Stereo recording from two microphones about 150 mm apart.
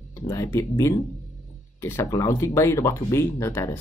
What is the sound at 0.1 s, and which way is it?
Speech, 20° left (ahead or behind).